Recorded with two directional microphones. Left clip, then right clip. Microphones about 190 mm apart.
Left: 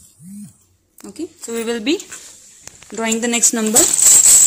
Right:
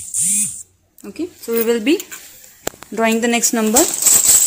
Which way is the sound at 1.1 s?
15° right (ahead or behind).